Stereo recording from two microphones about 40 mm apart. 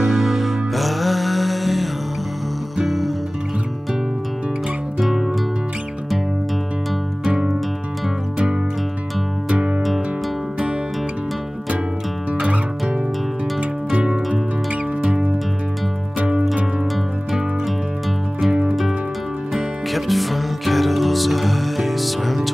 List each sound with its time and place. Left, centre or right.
0.0 s music: centre
5.0 s music: centre
7.2 s music: centre
9.5 s music: right
9.8 s music: centre
12.4 s music: right
13.9 s music: right
16.2 s music: right
19.5 s music: centre